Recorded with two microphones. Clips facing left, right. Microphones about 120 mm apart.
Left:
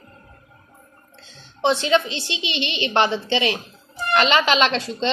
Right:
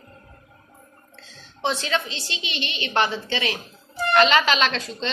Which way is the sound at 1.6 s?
20° left (ahead or behind).